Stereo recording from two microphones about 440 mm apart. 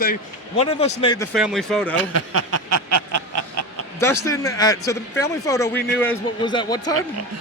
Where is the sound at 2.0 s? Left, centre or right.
Right.